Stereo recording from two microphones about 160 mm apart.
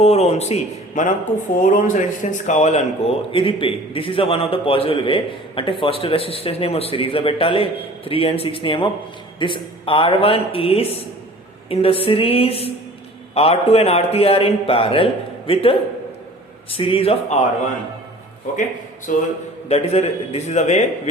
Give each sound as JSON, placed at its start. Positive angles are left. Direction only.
{"t": 0.0, "sound": "a man's voice", "side_deg": 40}
{"t": 18.5, "sound": "a man's voice", "side_deg": 55}
{"t": 19.6, "sound": "a man's voice", "side_deg": 40}